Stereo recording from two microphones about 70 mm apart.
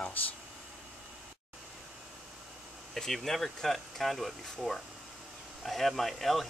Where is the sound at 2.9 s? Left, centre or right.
Centre.